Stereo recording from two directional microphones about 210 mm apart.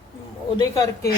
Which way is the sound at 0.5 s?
20° left (ahead or behind).